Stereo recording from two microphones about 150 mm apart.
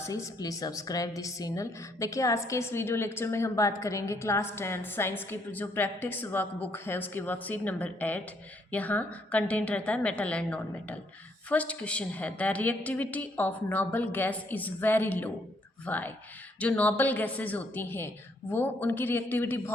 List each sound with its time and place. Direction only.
0.0 s a woman's voice: 20° left (ahead or behind)